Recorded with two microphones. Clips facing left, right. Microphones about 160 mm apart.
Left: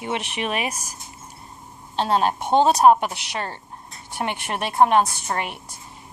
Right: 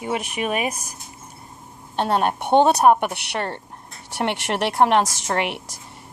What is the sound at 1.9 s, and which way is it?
A woman's voice, 60° right (ahead or behind).